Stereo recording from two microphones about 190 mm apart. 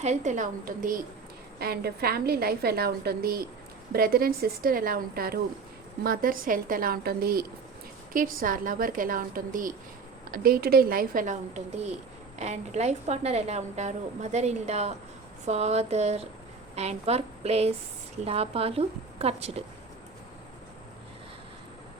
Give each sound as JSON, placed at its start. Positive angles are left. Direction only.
{"t": 0.0, "sound": "a woman's voice", "side_deg": -40}